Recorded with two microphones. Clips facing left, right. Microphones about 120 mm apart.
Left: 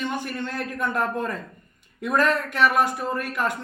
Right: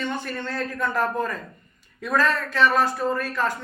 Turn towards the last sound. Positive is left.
turn(degrees=15)  # may be behind; listen again after turning